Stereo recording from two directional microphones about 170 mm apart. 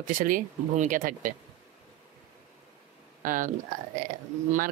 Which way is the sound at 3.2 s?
55° right (ahead or behind).